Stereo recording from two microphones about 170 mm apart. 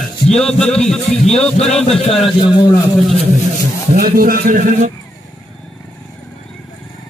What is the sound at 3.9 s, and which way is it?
Speech, 60° right (ahead or behind).